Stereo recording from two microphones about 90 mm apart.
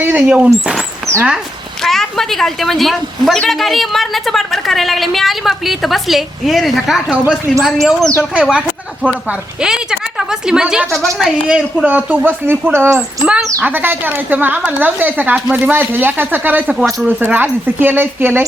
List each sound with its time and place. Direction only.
0.2 s a woman's voice: 10° right (ahead or behind)
1.8 s a woman's voice: 5° left (ahead or behind)
8.4 s a woman's voice: 10° right (ahead or behind)
10.9 s a woman's voice: 5° left (ahead or behind)
11.4 s speech: 10° right (ahead or behind); by 13.0 s 25° right (ahead or behind)
13.2 s speech: 15° right (ahead or behind)
16.7 s a woman's voice: 5° right (ahead or behind)
17.2 s speech: 20° right (ahead or behind)